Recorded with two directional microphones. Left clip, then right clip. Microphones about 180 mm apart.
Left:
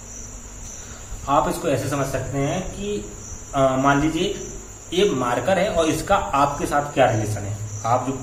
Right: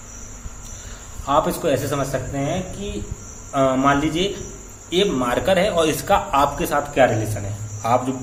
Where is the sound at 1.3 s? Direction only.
40° right (ahead or behind).